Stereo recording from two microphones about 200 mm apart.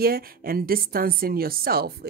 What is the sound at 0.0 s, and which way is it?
A woman's voice, 50° right (ahead or behind).